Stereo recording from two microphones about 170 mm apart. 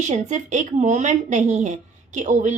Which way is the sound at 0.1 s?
45° right (ahead or behind).